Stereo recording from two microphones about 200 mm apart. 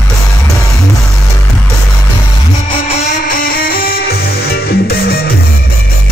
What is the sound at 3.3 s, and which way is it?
Music, 50° left (ahead or behind).